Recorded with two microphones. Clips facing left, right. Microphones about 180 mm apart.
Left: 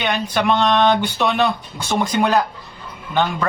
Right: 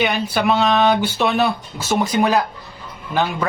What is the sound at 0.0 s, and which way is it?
Speech, 5° right (ahead or behind).